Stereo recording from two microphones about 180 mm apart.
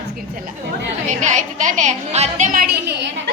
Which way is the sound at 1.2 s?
45° right (ahead or behind).